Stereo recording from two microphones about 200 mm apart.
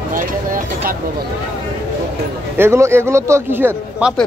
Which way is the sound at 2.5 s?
10° right (ahead or behind).